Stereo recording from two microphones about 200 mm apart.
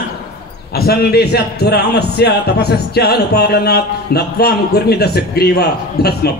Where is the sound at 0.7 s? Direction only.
50° left (ahead or behind).